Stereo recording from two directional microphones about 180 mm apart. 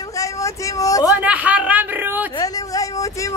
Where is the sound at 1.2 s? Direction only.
10° right (ahead or behind).